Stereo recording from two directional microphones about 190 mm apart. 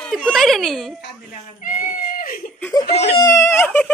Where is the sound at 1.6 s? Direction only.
45° left (ahead or behind).